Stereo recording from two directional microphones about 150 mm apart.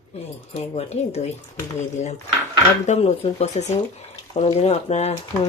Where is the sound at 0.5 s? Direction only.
45° left (ahead or behind).